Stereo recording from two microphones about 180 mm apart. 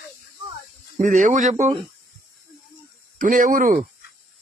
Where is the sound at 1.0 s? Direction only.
45° right (ahead or behind).